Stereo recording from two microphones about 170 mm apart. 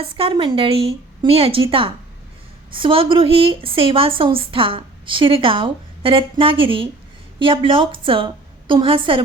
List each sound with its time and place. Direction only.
0.0 s a woman's voice: 30° right (ahead or behind)